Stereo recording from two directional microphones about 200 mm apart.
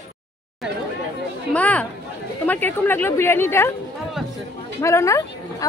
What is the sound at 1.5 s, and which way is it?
Speech, 5° left (ahead or behind).